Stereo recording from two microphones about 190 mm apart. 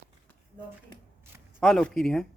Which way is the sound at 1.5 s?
Centre (ahead or behind).